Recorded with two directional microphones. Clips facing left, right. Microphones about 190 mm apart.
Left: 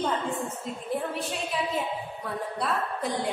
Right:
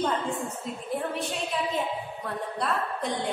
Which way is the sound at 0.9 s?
Centre (ahead or behind).